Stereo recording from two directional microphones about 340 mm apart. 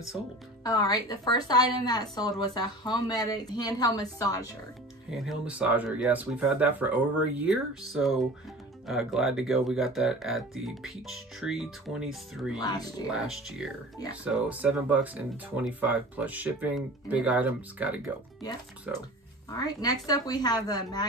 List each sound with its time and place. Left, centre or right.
0.7 s a woman's voice: centre
5.1 s speech: centre
12.5 s a woman's voice: centre
13.1 s speech: centre
19.5 s a woman's voice: centre